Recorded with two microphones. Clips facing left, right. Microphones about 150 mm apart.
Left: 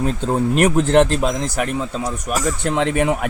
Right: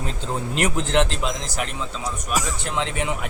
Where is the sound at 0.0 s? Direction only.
45° left (ahead or behind).